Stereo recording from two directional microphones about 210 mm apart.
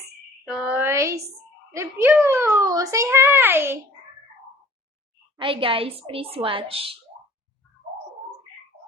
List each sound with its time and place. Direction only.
0.4 s a sound: 5° right (ahead or behind)
1.7 s speech: 10° right (ahead or behind)
5.4 s a woman's voice: 25° right (ahead or behind)